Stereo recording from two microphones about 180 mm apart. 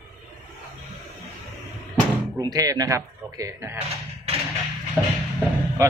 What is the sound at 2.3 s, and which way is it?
Speech, 20° right (ahead or behind).